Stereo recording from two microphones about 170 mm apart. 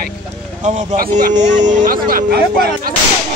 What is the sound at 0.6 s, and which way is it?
Speech, 45° right (ahead or behind).